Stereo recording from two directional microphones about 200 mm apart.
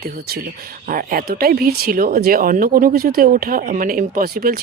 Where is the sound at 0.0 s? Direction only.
50° right (ahead or behind).